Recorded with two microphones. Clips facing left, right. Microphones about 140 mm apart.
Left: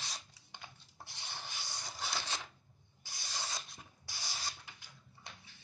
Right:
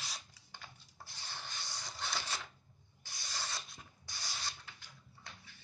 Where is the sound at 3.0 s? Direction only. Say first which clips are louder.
Even; 10° left (ahead or behind).